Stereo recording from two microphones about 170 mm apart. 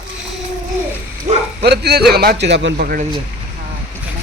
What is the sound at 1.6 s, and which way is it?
Speech, 70° right (ahead or behind).